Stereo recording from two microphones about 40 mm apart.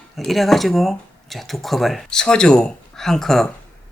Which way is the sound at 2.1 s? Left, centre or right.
Centre.